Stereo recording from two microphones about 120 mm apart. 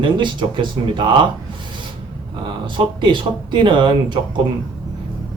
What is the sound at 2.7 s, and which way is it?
Speech, 40° right (ahead or behind).